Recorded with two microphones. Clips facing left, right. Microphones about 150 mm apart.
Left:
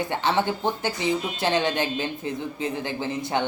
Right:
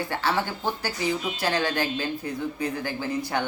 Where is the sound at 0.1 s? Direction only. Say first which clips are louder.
Left 3 dB; 20° left (ahead or behind).